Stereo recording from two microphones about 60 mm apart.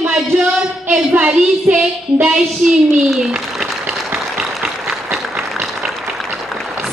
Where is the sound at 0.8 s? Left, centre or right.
Right.